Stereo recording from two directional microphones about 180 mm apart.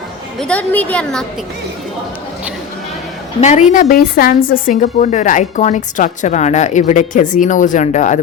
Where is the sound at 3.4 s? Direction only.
40° left (ahead or behind).